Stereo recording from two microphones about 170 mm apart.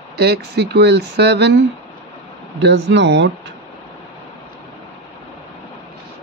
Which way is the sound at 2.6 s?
90° right.